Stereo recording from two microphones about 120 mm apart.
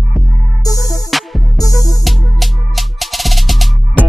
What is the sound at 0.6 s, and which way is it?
Music, 30° left (ahead or behind).